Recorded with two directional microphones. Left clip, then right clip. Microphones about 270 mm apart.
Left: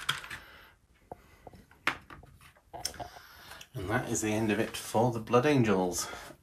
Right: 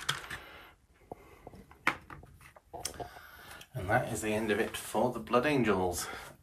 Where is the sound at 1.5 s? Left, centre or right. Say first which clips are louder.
Left 1 dB; right.